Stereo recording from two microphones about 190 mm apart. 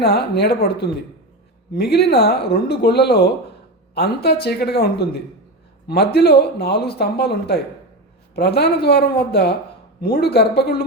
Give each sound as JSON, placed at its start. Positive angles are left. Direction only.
{"t": 0.0, "sound": "speech", "side_deg": 60}